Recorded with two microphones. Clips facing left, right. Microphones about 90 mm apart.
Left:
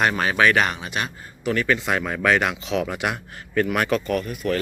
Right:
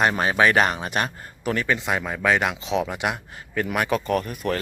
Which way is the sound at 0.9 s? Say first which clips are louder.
Right 2 dB; 45° right (ahead or behind).